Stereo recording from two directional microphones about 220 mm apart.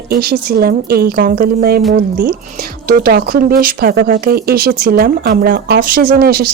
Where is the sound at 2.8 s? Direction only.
40° right (ahead or behind).